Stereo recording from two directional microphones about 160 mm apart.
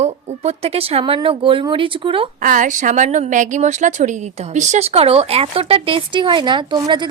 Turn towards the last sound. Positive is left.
turn(degrees=-30)  # may be behind; listen again after turning